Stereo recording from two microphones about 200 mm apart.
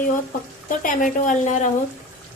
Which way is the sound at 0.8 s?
40° left (ahead or behind).